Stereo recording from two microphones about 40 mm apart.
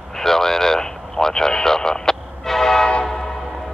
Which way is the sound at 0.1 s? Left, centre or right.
Centre.